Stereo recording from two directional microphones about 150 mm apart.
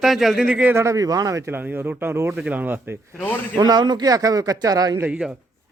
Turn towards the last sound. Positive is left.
turn(degrees=-10)  # may be behind; listen again after turning